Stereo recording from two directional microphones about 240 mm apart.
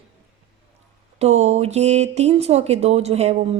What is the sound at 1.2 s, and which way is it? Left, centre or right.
Speech, right.